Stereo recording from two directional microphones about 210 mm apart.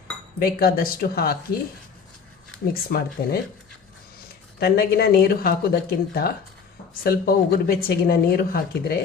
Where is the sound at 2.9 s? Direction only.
45° left (ahead or behind).